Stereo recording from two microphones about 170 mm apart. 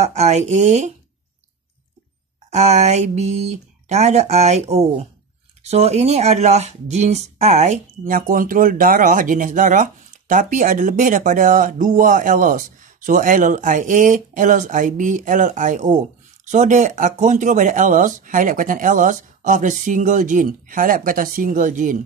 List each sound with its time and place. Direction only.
0.0 s speech: 40° right (ahead or behind)
2.5 s speech: 40° right (ahead or behind)